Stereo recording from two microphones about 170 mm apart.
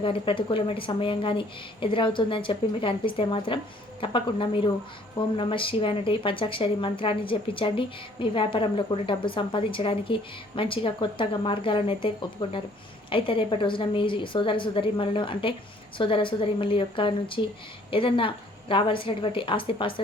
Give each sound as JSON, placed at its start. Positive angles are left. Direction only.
{"t": 0.0, "sound": "a woman's voice", "side_deg": 30}